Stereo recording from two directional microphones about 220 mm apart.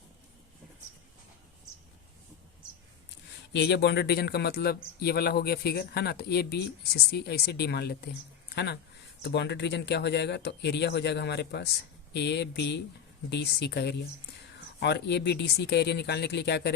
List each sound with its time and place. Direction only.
3.5 s speech: 50° left (ahead or behind)